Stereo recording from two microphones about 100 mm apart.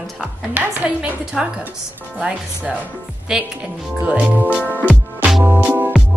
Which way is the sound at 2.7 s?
5° right (ahead or behind).